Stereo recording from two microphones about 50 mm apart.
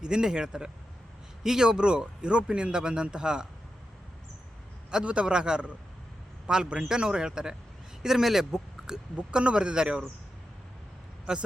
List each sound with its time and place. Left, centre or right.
0.0 s a man's voice: centre
4.9 s a man's voice: centre
9.1 s a man's voice: right